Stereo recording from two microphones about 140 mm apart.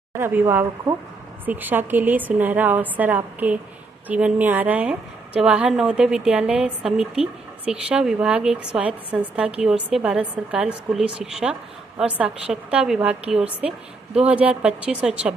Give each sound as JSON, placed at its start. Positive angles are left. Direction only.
{"t": 0.2, "sound": "a woman's voice", "side_deg": -15}